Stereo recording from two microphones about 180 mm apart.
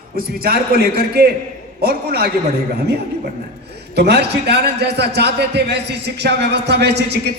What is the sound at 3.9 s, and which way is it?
A man's voice, 65° right (ahead or behind).